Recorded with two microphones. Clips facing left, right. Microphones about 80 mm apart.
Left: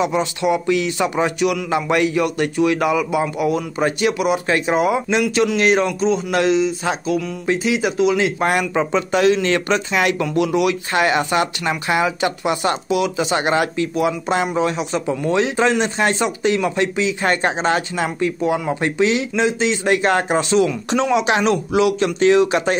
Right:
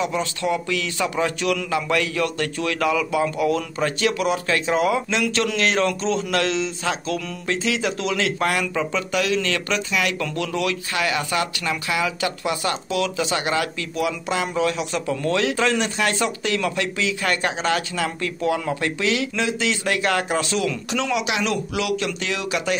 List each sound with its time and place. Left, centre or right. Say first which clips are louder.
0.0 s speech: left 5 dB; left
10.9 s speech: left 6 dB; left